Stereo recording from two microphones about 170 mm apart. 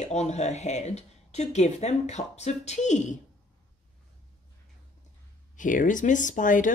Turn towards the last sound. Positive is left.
turn(degrees=50)  # may be behind; listen again after turning